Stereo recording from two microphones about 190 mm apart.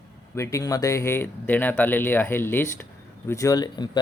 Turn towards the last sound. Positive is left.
turn(degrees=20)  # may be behind; listen again after turning